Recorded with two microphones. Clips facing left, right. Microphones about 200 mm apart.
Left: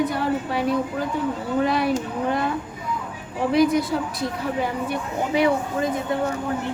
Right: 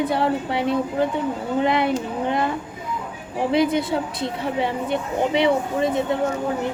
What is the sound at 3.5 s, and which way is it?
Speech, 25° right (ahead or behind).